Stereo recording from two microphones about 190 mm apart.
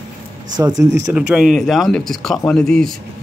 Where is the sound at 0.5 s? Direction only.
20° right (ahead or behind).